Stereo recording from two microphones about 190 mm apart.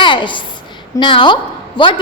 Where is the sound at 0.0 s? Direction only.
25° left (ahead or behind).